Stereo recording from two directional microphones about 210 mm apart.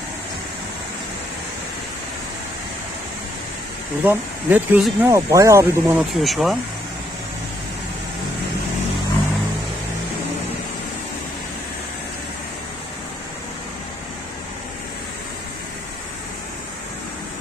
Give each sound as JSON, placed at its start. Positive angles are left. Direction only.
{"t": 4.0, "sound": "speech", "side_deg": -10}